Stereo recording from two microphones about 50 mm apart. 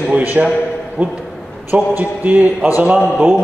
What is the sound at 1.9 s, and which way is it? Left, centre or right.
Speech, right.